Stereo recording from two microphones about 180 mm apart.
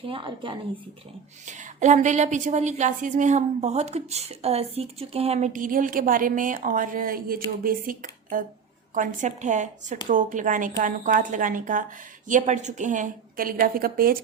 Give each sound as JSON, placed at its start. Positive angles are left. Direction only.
{"t": 0.1, "sound": "speech", "side_deg": -25}
{"t": 1.5, "sound": "a woman's voice", "side_deg": -45}